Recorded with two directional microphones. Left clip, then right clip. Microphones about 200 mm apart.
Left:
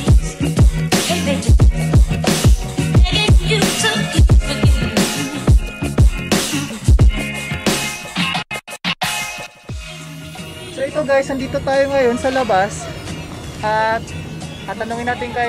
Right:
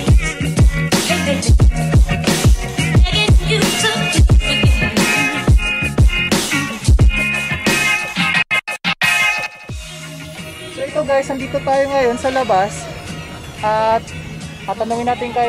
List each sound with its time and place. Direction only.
0.0 s music: centre (ahead or behind)
10.8 s speech: centre (ahead or behind)